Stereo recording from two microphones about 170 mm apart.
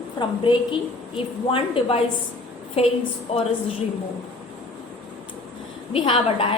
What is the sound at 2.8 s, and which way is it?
Speech, 35° left (ahead or behind).